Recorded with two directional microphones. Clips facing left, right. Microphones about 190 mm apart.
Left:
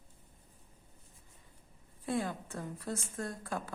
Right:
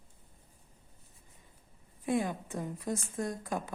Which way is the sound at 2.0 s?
15° right (ahead or behind).